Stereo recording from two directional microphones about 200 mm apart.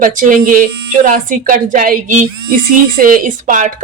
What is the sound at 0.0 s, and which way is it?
A woman's voice, 40° right (ahead or behind).